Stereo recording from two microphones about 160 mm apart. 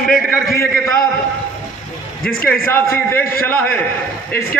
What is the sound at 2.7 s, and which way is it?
A man's voice, 15° left (ahead or behind).